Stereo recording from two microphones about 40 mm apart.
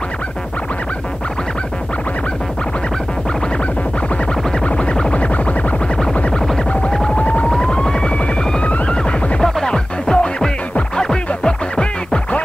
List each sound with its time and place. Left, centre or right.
5.1 s music: left
7.2 s throbbing: left
7.4 s throbbing: centre
8.5 s music: left
8.9 s music: centre